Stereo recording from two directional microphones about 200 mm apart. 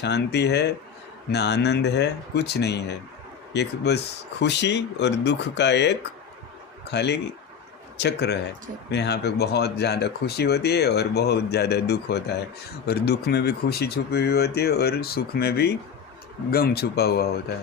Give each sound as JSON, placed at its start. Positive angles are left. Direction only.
{"t": 0.0, "sound": "speech", "side_deg": 55}